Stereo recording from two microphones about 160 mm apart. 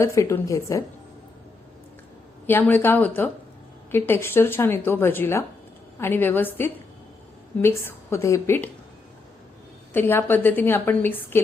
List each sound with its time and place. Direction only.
0.0 s a woman's voice: 20° left (ahead or behind)
2.5 s a woman's voice: 10° left (ahead or behind)
9.9 s a woman's voice: 15° left (ahead or behind)